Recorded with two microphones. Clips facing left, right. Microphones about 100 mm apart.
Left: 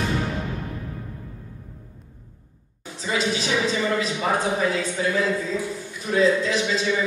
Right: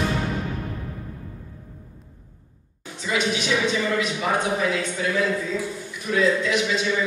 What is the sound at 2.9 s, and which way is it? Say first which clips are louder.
A man's voice: even; 35° left (ahead or behind).